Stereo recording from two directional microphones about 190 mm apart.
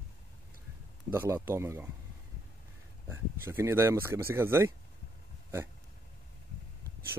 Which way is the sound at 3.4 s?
15° right (ahead or behind).